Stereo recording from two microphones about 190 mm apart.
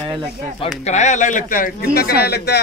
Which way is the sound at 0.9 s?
40° left (ahead or behind).